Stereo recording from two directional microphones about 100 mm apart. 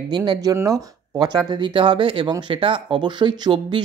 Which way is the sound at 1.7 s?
55° right (ahead or behind).